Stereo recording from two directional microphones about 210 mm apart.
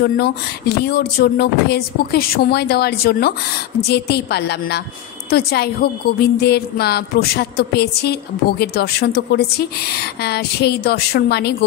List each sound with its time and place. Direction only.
0.0 s a woman's voice: 50° left (ahead or behind)